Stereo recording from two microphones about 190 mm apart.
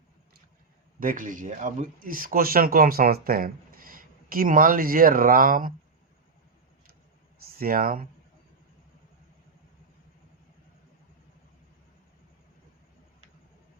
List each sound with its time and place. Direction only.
0.9 s speech: 45° right (ahead or behind)
7.6 s speech: 50° right (ahead or behind)